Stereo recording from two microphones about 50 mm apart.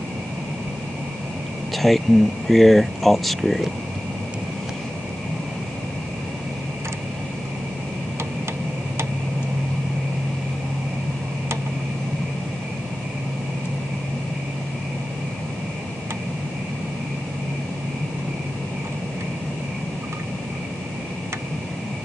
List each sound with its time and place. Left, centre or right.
1.8 s speech: centre